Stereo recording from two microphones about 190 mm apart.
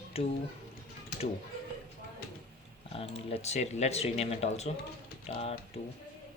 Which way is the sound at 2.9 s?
30° left (ahead or behind).